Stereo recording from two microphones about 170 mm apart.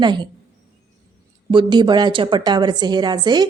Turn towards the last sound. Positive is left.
turn(degrees=-25)  # may be behind; listen again after turning